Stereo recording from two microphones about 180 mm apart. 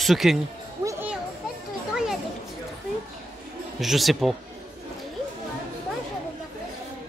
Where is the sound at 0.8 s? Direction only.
15° right (ahead or behind).